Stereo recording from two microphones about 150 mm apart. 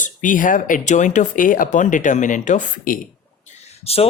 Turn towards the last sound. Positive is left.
turn(degrees=40)  # may be behind; listen again after turning